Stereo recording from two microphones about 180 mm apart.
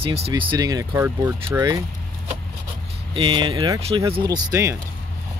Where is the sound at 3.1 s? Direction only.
30° right (ahead or behind).